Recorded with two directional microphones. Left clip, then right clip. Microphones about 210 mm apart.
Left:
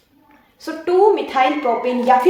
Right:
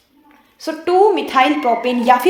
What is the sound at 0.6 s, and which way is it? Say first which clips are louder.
A woman's voice: right 2 dB; 45° right (ahead or behind).